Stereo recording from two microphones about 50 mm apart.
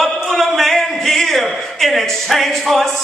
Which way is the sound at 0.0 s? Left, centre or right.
Centre.